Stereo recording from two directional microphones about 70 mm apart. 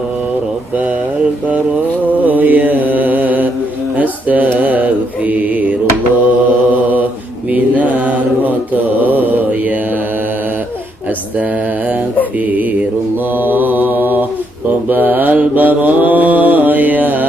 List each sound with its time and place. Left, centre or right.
2.2 s mantra: right
7.5 s mantra: right
13.4 s mantra: right